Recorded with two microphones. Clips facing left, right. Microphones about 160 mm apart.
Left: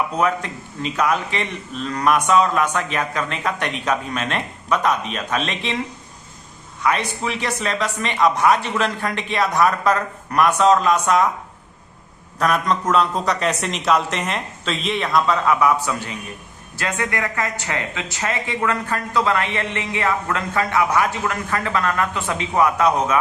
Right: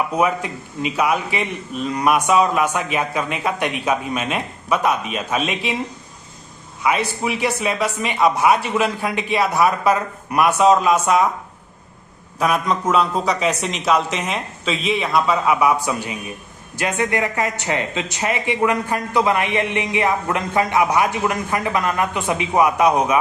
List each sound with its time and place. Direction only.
0.1 s speech: 10° right (ahead or behind)
6.8 s speech: 10° right (ahead or behind)
12.4 s speech: 5° right (ahead or behind)